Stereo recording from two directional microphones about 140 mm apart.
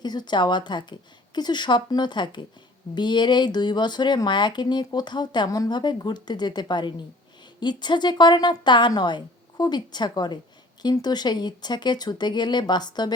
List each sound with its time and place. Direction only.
0.0 s speech: 30° left (ahead or behind)